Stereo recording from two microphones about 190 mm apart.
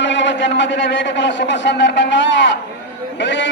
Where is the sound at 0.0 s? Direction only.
70° left (ahead or behind).